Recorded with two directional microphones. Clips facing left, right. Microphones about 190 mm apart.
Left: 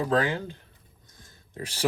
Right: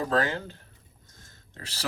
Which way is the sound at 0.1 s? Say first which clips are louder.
Left 2 dB; 15° left (ahead or behind).